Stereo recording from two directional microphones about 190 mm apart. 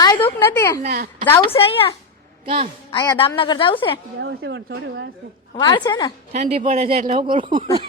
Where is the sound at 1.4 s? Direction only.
30° left (ahead or behind).